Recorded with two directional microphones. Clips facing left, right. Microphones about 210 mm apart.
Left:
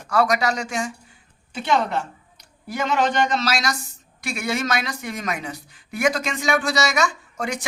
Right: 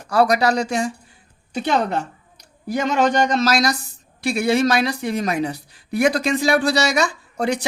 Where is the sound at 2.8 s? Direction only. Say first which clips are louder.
Right 3 dB; 45° right (ahead or behind).